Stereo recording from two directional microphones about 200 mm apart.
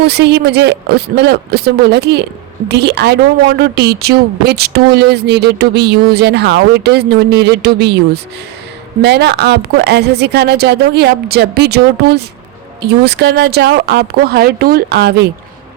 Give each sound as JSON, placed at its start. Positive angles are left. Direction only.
{"t": 0.0, "sound": "a woman's voice", "side_deg": -55}